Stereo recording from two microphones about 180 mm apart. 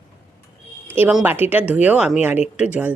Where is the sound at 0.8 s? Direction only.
10° right (ahead or behind).